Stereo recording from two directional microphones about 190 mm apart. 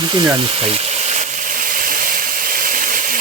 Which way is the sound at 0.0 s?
25° right (ahead or behind).